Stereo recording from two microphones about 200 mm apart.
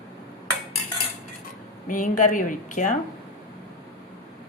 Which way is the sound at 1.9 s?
40° left (ahead or behind).